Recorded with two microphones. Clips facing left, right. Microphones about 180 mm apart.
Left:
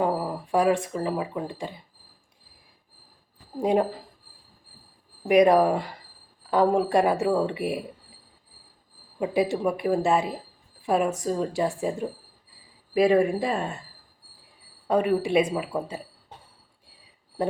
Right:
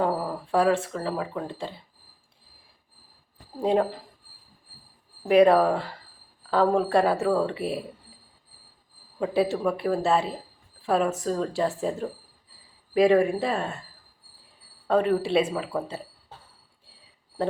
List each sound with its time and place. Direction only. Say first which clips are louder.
0.0 s speech: even; 15° left (ahead or behind)
3.6 s speech: even; 15° left (ahead or behind)
5.2 s speech: even; 15° left (ahead or behind)
9.1 s speech: even; 15° left (ahead or behind)
13.4 s speech: even; 10° left (ahead or behind)
14.8 s speech: even; 15° left (ahead or behind)